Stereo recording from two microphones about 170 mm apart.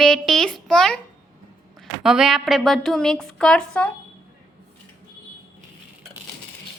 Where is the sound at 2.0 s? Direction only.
Centre (ahead or behind).